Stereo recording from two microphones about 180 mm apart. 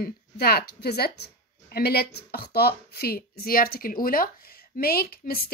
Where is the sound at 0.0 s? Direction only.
60° left (ahead or behind).